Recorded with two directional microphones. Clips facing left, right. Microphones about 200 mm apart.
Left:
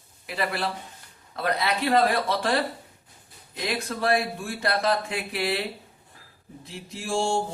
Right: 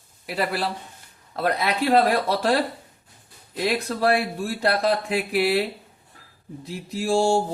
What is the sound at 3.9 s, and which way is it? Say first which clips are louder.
Speech: even; 35° right (ahead or behind).